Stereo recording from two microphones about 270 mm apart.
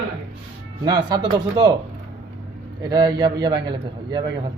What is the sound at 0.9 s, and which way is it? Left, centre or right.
Speech, centre.